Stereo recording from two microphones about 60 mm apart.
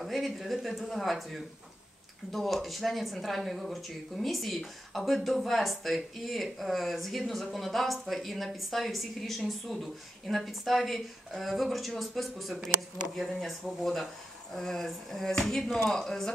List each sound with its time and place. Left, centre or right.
0.0 s speech: centre